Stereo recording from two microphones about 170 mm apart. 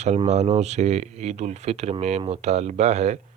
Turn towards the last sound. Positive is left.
turn(degrees=-40)  # may be behind; listen again after turning